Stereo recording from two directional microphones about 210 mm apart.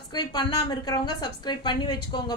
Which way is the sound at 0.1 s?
20° left (ahead or behind).